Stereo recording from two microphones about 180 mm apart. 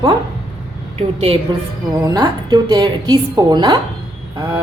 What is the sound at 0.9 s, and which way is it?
Speech, 30° right (ahead or behind).